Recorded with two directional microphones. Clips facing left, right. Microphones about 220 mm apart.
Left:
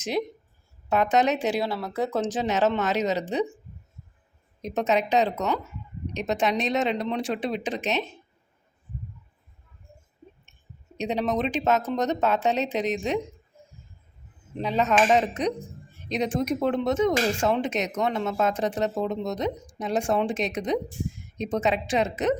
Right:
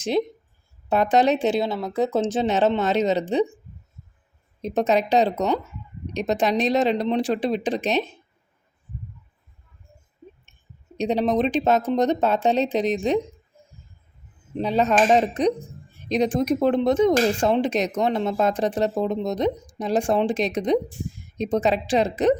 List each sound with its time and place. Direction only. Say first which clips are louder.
0.9 s speech: right 3 dB; 35° right (ahead or behind)
4.6 s speech: right 4 dB; 35° right (ahead or behind)
10.9 s speech: right 5 dB; 35° right (ahead or behind)
14.6 s speech: right 3 dB; 35° right (ahead or behind)